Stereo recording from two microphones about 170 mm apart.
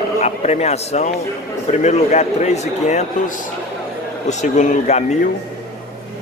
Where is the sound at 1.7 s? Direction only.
45° left (ahead or behind).